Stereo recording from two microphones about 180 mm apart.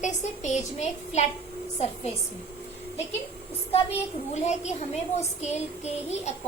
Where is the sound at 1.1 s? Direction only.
40° left (ahead or behind).